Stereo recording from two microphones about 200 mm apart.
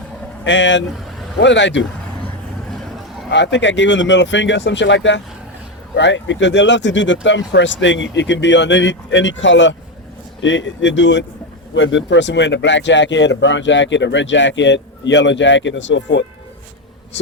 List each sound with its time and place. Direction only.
0.4 s speech: 65° left (ahead or behind)
3.2 s speech: 65° left (ahead or behind)